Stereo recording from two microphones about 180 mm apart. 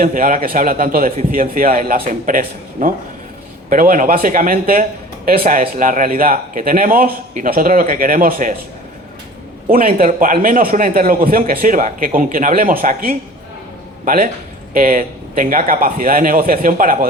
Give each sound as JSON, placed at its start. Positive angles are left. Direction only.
{"t": 0.0, "sound": "speech", "side_deg": -50}
{"t": 9.6, "sound": "a man's voice", "side_deg": -50}